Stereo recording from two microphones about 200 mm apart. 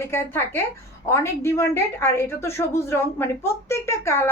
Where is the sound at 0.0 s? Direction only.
10° left (ahead or behind).